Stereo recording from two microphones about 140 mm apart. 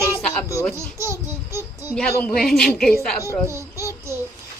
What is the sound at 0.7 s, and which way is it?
Babbling, 20° right (ahead or behind).